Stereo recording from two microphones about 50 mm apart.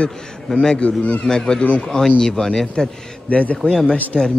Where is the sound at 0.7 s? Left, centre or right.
Left.